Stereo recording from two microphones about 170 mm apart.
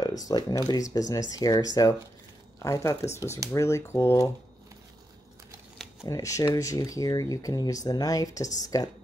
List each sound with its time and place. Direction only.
0.2 s speech: 20° left (ahead or behind)
6.0 s speech: 20° left (ahead or behind)